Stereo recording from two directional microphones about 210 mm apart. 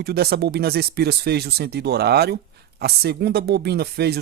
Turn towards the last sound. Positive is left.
turn(degrees=-50)  # may be behind; listen again after turning